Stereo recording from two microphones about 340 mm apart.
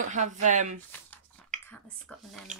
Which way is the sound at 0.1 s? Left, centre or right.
Right.